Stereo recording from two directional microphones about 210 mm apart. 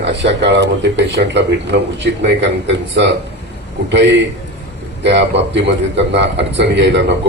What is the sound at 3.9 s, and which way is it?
A man's voice, 55° right (ahead or behind).